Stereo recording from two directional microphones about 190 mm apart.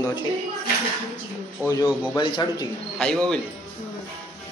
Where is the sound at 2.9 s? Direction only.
5° left (ahead or behind).